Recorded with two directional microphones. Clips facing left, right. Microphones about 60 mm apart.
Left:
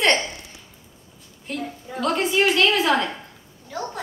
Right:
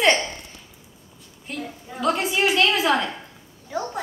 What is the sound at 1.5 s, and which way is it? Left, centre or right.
A child's voice, centre.